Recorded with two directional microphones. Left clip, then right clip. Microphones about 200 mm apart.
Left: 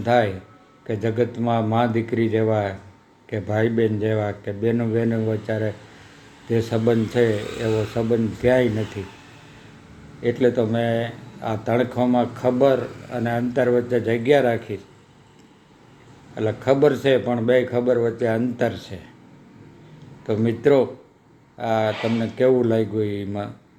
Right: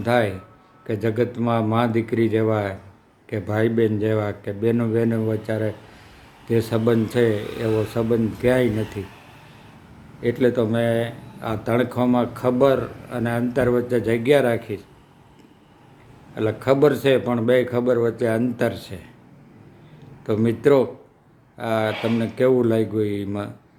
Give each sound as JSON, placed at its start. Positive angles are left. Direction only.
{"t": 0.0, "sound": "speech", "side_deg": -15}
{"t": 10.2, "sound": "speech", "side_deg": -15}
{"t": 16.3, "sound": "speech", "side_deg": -20}
{"t": 20.2, "sound": "speech", "side_deg": -20}